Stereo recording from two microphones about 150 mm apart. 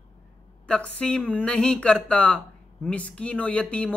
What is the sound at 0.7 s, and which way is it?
A man's voice, 5° left (ahead or behind).